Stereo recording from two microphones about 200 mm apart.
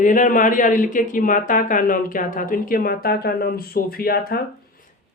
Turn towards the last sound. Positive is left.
turn(degrees=50)  # may be behind; listen again after turning